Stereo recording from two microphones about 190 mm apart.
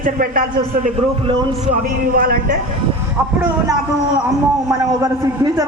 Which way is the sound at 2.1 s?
50° right (ahead or behind).